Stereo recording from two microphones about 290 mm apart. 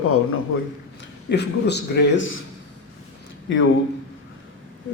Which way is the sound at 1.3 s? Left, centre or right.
Left.